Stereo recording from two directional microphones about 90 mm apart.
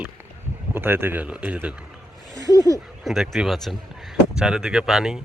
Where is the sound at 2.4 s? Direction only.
45° left (ahead or behind).